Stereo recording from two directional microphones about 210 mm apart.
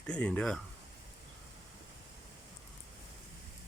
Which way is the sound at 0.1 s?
5° left (ahead or behind).